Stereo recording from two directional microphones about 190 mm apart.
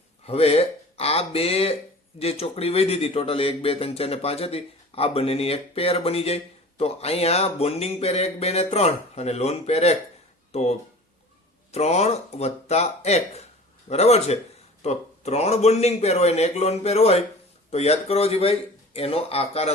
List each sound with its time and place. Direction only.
0.3 s speech: 30° left (ahead or behind)